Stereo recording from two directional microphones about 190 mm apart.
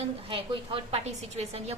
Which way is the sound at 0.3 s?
30° right (ahead or behind).